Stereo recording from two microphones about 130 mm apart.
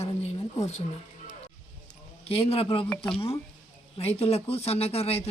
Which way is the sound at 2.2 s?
50° left (ahead or behind).